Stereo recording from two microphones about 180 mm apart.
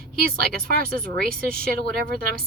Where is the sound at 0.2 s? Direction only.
55° right (ahead or behind).